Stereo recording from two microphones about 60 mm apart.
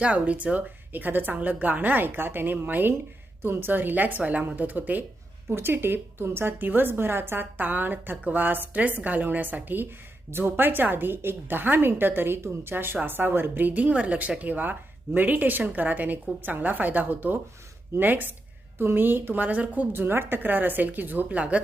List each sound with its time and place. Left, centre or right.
0.0 s a woman's voice: right
5.5 s a woman's voice: right